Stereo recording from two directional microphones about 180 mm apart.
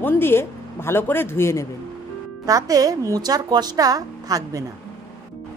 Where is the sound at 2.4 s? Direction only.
20° right (ahead or behind).